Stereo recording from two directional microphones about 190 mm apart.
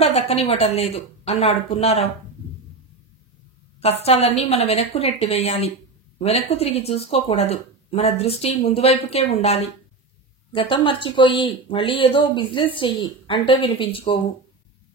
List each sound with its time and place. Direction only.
0.0 s speech: 35° left (ahead or behind)
3.8 s speech: 35° left (ahead or behind)